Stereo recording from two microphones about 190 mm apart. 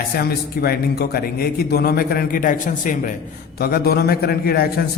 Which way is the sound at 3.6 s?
55° left (ahead or behind).